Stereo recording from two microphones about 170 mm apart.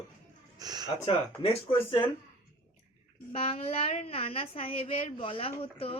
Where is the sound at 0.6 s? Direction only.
25° right (ahead or behind).